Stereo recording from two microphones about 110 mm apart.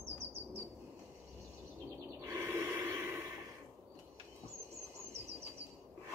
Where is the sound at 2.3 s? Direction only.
25° right (ahead or behind).